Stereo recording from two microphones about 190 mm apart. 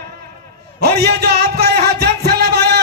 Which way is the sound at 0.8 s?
60° right (ahead or behind).